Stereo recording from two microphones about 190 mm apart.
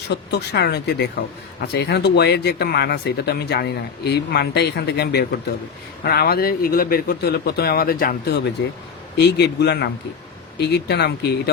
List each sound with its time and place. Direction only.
0.1 s speech: 60° left (ahead or behind)
9.1 s speech: 65° left (ahead or behind)